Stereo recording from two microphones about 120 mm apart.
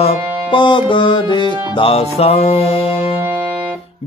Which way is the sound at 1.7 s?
55° left (ahead or behind).